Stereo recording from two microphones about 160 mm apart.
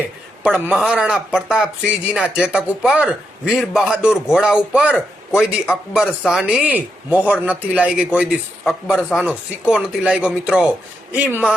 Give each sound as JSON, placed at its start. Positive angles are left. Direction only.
{"t": 0.6, "sound": "speech", "side_deg": -5}